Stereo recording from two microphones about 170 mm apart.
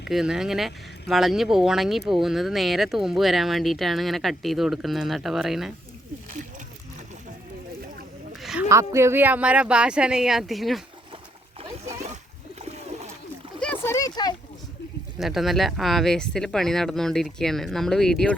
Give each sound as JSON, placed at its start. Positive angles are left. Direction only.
{"t": 0.1, "sound": "speech", "side_deg": 0}
{"t": 8.4, "sound": "a sound", "side_deg": 0}
{"t": 8.7, "sound": "speech", "side_deg": -15}
{"t": 11.7, "sound": "splash", "side_deg": -40}
{"t": 12.6, "sound": "pigeon", "side_deg": -40}
{"t": 13.8, "sound": "a sound", "side_deg": 20}
{"t": 15.2, "sound": "speech", "side_deg": 0}